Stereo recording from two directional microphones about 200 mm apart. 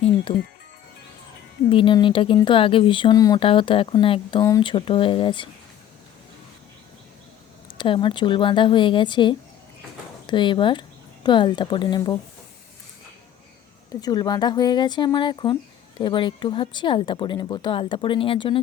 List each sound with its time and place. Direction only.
0.3 s speech: 25° left (ahead or behind)
1.7 s speech: 25° left (ahead or behind)
7.8 s speech: 25° left (ahead or behind)
13.9 s speech: 20° left (ahead or behind)